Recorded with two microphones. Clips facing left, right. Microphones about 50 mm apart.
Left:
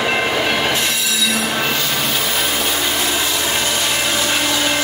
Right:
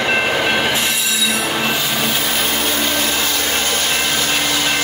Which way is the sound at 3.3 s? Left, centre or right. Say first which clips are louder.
Even; centre.